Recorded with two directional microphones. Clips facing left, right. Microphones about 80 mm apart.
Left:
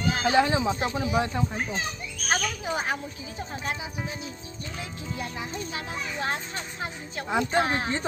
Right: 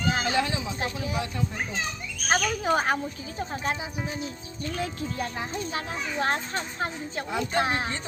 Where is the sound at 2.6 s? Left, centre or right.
Right.